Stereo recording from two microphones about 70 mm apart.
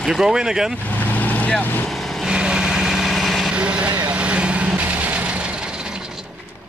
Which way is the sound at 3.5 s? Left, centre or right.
Centre.